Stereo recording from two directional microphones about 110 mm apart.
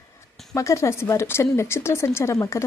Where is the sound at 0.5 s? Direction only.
30° left (ahead or behind).